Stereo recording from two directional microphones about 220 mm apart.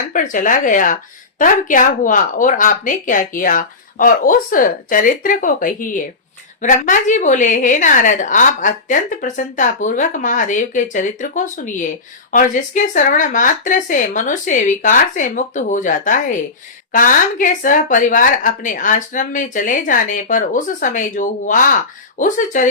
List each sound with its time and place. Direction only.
0.1 s a woman's voice: 35° left (ahead or behind)